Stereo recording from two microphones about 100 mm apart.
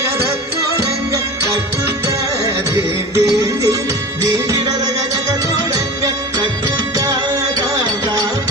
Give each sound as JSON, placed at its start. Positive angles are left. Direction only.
{"t": 2.7, "sound": "music", "side_deg": -30}